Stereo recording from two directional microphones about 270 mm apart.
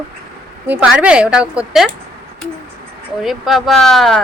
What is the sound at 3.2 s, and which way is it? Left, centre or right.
A woman's voice, centre.